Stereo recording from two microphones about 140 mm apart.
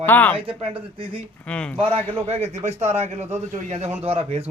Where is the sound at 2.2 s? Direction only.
50° right (ahead or behind).